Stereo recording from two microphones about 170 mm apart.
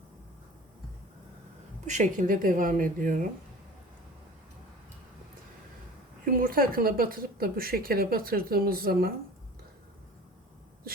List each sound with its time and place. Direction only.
1.9 s speech: 45° right (ahead or behind)
6.2 s speech: 55° right (ahead or behind)